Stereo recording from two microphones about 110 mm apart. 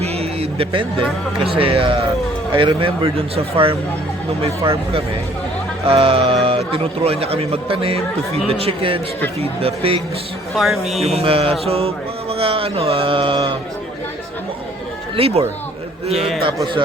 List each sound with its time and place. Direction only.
0.0 s a sound: 70° right (ahead or behind); by 1.0 s 55° right (ahead or behind)
1.5 s a man's voice: 60° right (ahead or behind)
10.5 s a man's voice: centre (ahead or behind)
11.0 s a man's voice: 65° right (ahead or behind); by 13.6 s 50° right (ahead or behind)
15.1 s a man's voice: 60° right (ahead or behind)